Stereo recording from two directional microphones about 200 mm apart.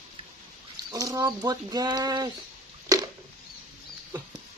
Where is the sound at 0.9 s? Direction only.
20° right (ahead or behind).